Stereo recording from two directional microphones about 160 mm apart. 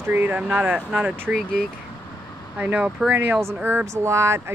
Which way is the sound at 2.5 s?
10° right (ahead or behind).